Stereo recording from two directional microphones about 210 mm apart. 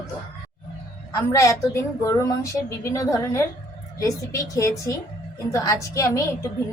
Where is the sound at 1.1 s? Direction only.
15° left (ahead or behind).